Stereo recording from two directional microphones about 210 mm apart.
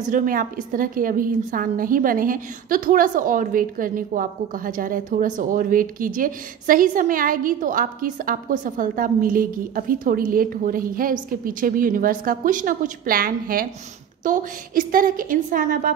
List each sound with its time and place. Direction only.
0.1 s a woman's voice: 40° right (ahead or behind)